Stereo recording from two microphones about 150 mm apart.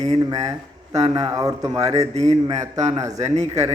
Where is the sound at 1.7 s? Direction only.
45° right (ahead or behind).